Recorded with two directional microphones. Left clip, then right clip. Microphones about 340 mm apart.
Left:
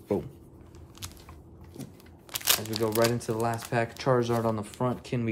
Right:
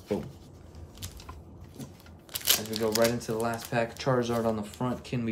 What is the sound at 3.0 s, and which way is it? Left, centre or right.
Speech, centre.